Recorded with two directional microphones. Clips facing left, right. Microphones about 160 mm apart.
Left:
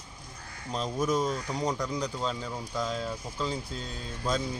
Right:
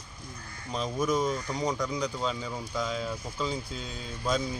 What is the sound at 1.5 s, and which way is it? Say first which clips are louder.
Speech: even; 5° left (ahead or behind).